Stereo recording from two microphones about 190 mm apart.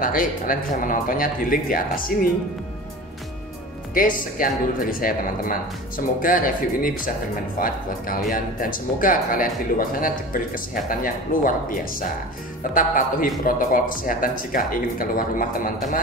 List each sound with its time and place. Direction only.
0.0 s speech: 45° left (ahead or behind)
3.9 s speech: 45° left (ahead or behind)